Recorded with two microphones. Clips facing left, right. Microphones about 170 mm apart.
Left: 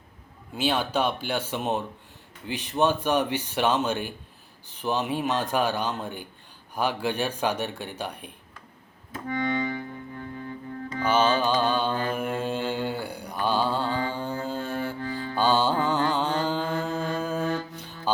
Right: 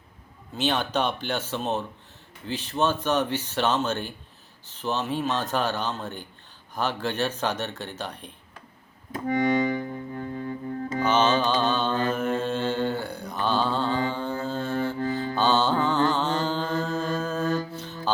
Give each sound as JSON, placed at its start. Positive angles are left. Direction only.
{"t": 0.5, "sound": "speech", "side_deg": 10}
{"t": 9.4, "sound": "music", "side_deg": -45}
{"t": 11.0, "sound": "mantra", "side_deg": 10}
{"t": 15.0, "sound": "mantra", "side_deg": -40}
{"t": 15.4, "sound": "mantra", "side_deg": 10}
{"t": 17.7, "sound": "music", "side_deg": 15}